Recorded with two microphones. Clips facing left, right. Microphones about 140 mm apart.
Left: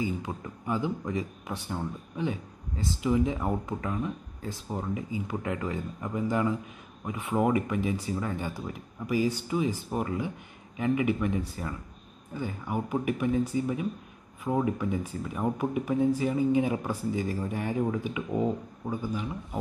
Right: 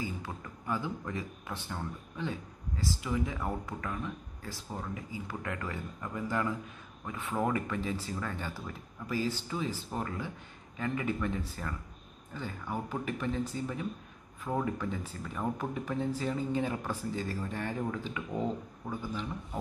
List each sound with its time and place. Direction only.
0.0 s speech: 20° left (ahead or behind)